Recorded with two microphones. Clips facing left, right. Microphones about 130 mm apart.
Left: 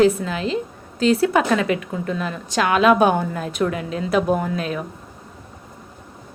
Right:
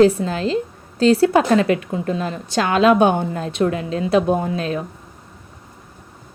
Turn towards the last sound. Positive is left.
turn(degrees=-30)  # may be behind; listen again after turning